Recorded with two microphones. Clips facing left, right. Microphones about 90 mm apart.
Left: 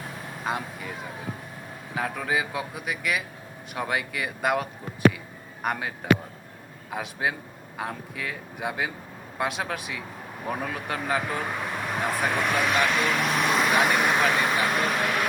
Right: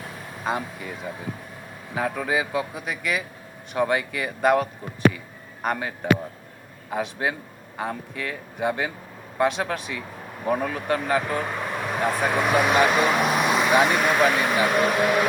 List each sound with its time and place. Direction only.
0.4 s speech: centre (ahead or behind)
2.0 s speech: centre (ahead or behind)
6.9 s speech: centre (ahead or behind)
12.6 s speech: 20° right (ahead or behind)
13.3 s vehicle: 5° right (ahead or behind)
14.0 s speech: 5° right (ahead or behind)